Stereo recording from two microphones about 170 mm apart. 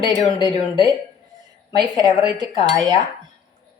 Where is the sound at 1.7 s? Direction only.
25° right (ahead or behind).